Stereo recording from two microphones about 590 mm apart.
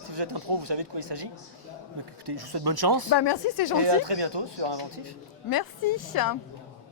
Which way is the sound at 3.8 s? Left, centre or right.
Right.